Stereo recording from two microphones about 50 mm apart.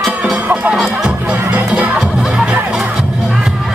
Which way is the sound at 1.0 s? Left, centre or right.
Right.